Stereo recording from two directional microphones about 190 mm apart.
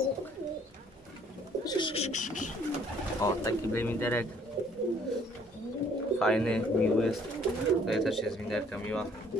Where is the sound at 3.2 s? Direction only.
15° left (ahead or behind).